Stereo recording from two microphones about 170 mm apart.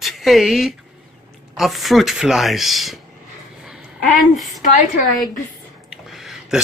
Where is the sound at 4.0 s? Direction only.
50° left (ahead or behind).